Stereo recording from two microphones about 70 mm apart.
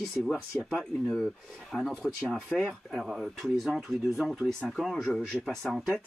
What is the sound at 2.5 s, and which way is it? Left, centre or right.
Speech, left.